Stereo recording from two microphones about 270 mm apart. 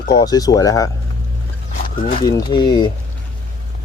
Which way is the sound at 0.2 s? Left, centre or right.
Centre.